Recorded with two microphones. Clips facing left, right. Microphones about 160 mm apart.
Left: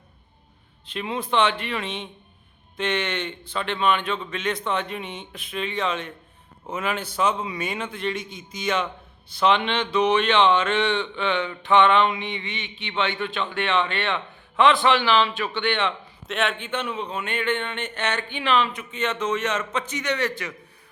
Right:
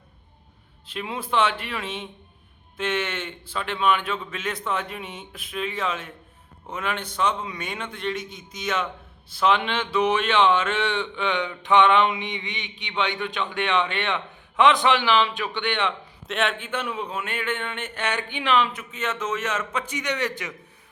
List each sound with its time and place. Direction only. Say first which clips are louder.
0.9 s a man's voice: left 2 dB; 5° right (ahead or behind)
16.2 s speech: even; centre (ahead or behind); by 20.6 s 15° right (ahead or behind)